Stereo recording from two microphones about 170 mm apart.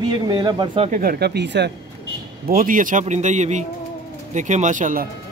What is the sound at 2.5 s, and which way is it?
Speech, 55° right (ahead or behind).